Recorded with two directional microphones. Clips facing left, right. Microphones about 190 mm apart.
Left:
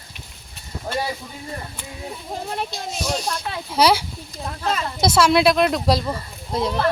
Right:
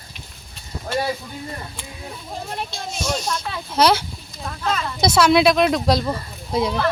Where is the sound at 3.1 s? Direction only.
10° left (ahead or behind).